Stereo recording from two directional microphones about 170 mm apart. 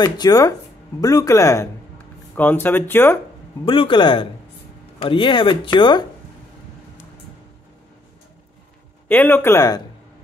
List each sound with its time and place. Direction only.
0.0 s speech: 25° left (ahead or behind)
3.6 s a man's voice: 30° left (ahead or behind)
9.1 s speech: 10° left (ahead or behind)